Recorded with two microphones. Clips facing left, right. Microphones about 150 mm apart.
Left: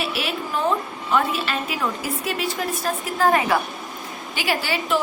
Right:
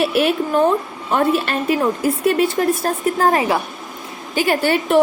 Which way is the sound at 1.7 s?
55° right (ahead or behind).